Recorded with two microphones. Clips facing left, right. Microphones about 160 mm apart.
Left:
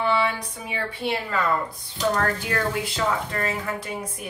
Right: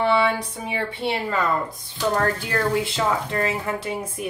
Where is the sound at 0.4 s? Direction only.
20° right (ahead or behind).